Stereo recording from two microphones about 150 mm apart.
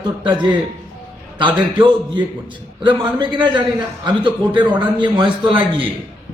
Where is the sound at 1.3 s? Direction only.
30° right (ahead or behind).